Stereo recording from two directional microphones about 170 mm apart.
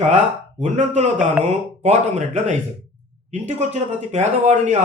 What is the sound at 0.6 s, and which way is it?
Speech, 40° right (ahead or behind).